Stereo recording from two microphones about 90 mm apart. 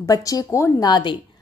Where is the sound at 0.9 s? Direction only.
60° left (ahead or behind).